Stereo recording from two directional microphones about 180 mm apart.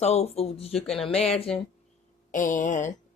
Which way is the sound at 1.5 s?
5° left (ahead or behind).